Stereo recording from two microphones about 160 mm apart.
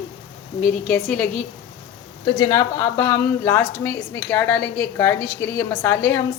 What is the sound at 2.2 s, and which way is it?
Speech, 25° left (ahead or behind).